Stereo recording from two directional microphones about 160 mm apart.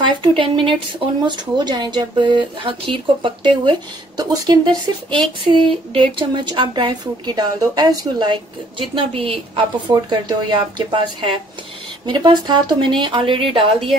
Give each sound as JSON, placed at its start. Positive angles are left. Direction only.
{"t": 0.4, "sound": "speech", "side_deg": -30}